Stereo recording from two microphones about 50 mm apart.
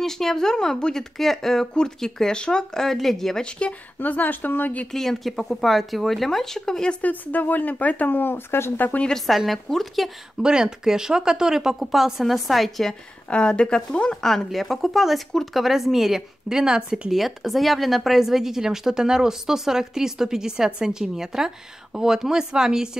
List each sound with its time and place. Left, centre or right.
0.0 s speech: centre
3.4 s speech: left
4.0 s speech: left
4.9 s speech: centre
7.0 s speech: left
8.7 s speech: left
9.1 s speech: centre
10.4 s a woman's voice: centre
13.3 s speech: centre
14.2 s a woman's voice: centre
17.1 s a woman's voice: centre